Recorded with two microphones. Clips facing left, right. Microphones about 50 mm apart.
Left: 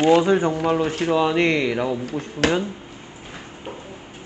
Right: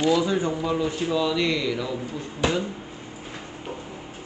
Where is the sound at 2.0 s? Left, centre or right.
Left.